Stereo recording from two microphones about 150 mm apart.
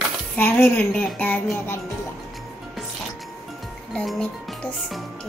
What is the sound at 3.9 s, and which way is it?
Speech, 5° left (ahead or behind).